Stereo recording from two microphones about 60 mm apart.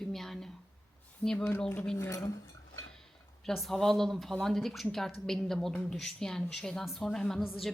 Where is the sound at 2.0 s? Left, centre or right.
Left.